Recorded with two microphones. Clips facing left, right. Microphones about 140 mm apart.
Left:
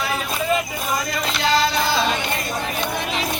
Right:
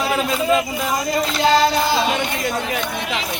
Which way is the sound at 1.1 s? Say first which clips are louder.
Right 6 dB; 35° right (ahead or behind).